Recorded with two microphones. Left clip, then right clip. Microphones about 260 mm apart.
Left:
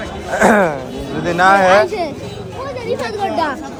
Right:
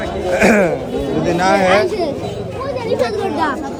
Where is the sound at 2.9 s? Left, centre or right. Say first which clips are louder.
Even; centre.